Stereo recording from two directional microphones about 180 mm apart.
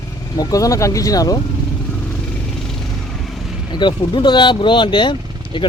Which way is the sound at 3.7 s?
25° left (ahead or behind).